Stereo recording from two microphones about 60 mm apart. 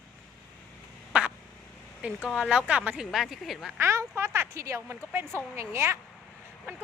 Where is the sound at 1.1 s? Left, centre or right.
Right.